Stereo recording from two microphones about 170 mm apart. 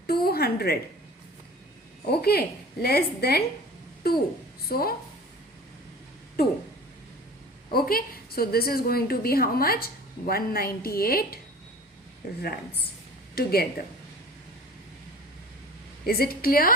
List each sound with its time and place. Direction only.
0.1 s a sound: 65° left (ahead or behind)
2.0 s a woman's voice: 70° left (ahead or behind)
7.7 s a woman's voice: 60° left (ahead or behind)
13.3 s a woman's voice: 60° left (ahead or behind)
16.0 s a woman's voice: 65° left (ahead or behind)